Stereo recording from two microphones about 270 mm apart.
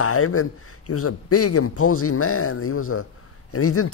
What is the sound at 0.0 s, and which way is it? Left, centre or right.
A man's voice, left.